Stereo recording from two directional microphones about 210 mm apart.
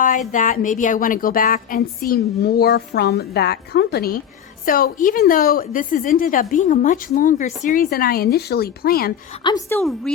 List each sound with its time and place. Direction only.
0.3 s a woman's voice: 40° left (ahead or behind)
9.4 s a woman's voice: 20° left (ahead or behind)